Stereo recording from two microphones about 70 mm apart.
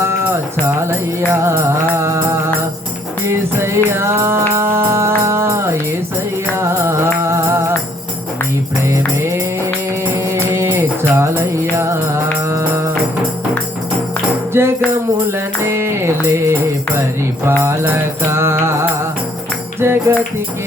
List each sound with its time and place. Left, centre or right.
1.3 s music: right
3.2 s music: right
8.8 s music: right
14.5 s music: right